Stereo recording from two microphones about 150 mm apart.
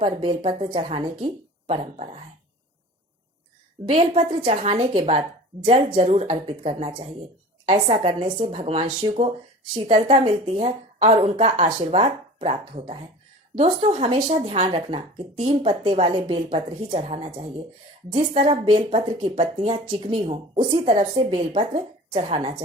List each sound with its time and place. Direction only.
0.0 s speech: 35° right (ahead or behind)
3.8 s speech: 40° right (ahead or behind)
18.4 s speech: 35° right (ahead or behind)